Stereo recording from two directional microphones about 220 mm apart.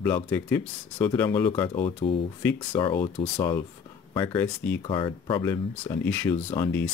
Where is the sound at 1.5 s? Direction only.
25° left (ahead or behind).